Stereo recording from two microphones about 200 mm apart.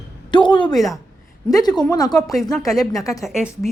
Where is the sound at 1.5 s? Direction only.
20° left (ahead or behind).